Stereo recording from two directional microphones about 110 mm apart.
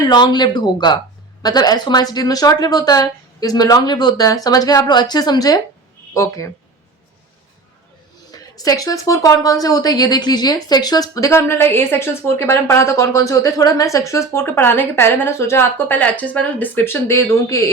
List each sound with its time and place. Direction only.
0.0 s a woman's voice: 40° left (ahead or behind)
8.3 s a woman's voice: 35° left (ahead or behind)